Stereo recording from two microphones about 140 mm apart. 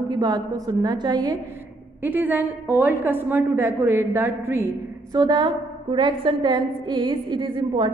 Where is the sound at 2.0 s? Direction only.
15° right (ahead or behind).